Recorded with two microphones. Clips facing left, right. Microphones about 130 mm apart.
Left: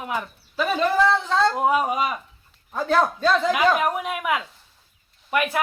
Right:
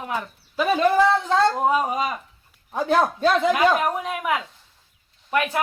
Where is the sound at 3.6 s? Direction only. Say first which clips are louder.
Right 1 dB; centre (ahead or behind).